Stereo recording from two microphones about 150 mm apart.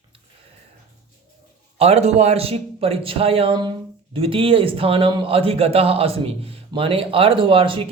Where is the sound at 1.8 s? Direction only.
45° right (ahead or behind).